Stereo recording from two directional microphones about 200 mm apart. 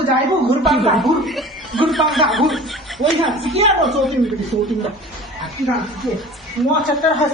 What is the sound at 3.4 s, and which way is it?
Speech, 30° right (ahead or behind).